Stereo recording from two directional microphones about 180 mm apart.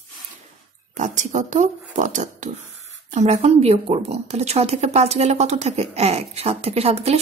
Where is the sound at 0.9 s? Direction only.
45° right (ahead or behind).